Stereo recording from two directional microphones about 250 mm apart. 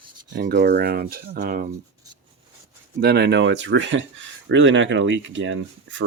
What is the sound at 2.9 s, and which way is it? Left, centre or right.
Speech, right.